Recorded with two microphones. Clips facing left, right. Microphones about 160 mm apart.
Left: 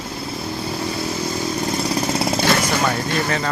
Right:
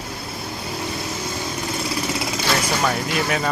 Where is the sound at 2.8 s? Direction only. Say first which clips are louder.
Left 1 dB; 10° right (ahead or behind).